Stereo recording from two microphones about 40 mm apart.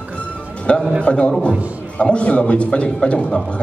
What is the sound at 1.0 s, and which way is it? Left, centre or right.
A man's voice, left.